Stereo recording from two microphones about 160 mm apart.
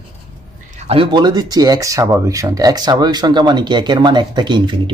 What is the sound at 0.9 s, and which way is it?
Speech, 30° right (ahead or behind).